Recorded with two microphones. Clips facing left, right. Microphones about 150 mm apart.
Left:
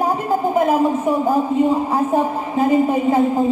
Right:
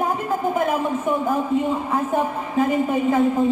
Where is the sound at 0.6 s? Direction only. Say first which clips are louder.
Left 5 dB; 30° left (ahead or behind).